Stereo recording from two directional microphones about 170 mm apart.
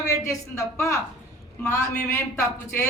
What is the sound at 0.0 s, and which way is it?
Speech, 15° left (ahead or behind).